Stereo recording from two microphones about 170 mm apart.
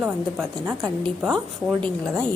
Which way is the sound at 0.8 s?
Centre (ahead or behind).